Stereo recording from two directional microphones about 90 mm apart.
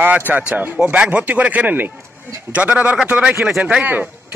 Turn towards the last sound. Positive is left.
turn(degrees=-15)  # may be behind; listen again after turning